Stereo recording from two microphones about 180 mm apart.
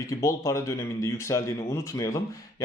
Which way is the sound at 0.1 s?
20° left (ahead or behind).